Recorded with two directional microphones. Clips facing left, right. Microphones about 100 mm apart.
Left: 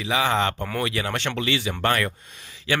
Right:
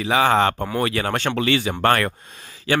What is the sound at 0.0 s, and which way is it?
Speech, 50° right (ahead or behind).